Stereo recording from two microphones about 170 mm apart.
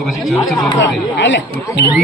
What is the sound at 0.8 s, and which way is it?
Speech, 90° left.